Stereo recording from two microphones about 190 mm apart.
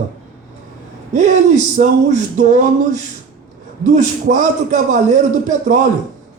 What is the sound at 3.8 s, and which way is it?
A man's voice, 40° right (ahead or behind).